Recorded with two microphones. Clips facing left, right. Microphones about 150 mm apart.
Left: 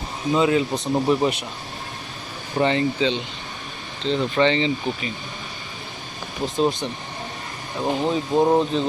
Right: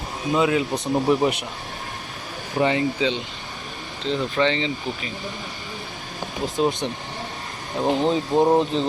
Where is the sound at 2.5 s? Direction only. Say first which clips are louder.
Left 1 dB; 5° right (ahead or behind).